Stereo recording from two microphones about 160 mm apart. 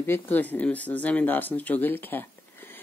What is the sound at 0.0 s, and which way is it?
Speech, 15° left (ahead or behind).